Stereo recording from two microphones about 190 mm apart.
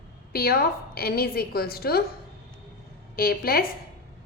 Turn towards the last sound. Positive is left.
turn(degrees=50)  # may be behind; listen again after turning